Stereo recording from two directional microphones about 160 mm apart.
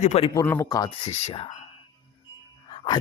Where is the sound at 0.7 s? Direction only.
25° left (ahead or behind).